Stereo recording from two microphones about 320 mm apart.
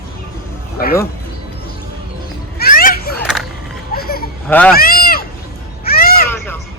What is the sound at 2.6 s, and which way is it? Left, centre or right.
Children playing, left.